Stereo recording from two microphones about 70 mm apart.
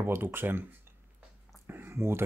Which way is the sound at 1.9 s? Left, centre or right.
Right.